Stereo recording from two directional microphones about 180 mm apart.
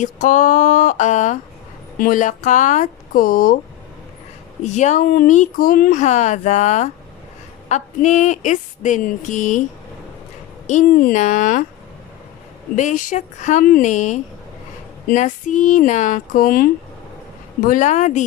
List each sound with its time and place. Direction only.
0.0 s a woman's voice: 45° left (ahead or behind)
4.6 s a woman's voice: 40° left (ahead or behind)
10.7 s a woman's voice: 50° left (ahead or behind)
12.7 s a woman's voice: 45° left (ahead or behind)